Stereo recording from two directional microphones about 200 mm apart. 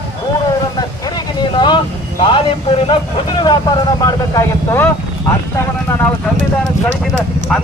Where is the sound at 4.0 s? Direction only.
15° left (ahead or behind).